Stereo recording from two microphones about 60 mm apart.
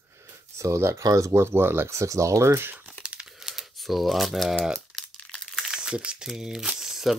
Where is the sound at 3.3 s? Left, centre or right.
Centre.